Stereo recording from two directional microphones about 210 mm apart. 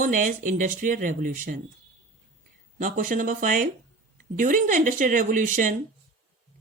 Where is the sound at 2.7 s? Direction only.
40° right (ahead or behind).